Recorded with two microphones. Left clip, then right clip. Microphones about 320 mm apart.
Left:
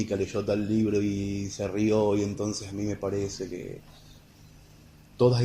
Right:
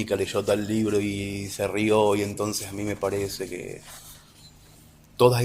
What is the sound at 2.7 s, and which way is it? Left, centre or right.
Speech, right.